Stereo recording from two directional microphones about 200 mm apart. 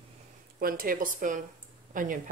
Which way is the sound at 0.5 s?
45° right (ahead or behind).